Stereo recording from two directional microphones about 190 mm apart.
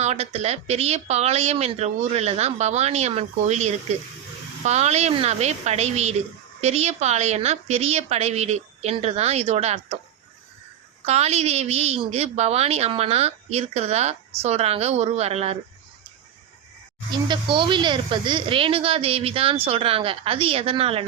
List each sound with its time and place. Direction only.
0.0 s a woman's voice: 35° right (ahead or behind)
11.0 s a woman's voice: 35° right (ahead or behind)
17.1 s speech: 25° right (ahead or behind)